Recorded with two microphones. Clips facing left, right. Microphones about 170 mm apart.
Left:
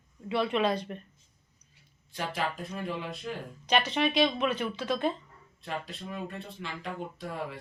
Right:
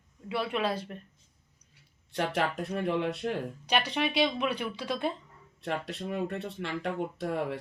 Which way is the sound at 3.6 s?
10° right (ahead or behind).